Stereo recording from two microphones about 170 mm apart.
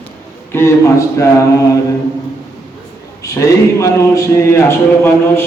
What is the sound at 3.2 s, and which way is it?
A man's voice, 20° left (ahead or behind).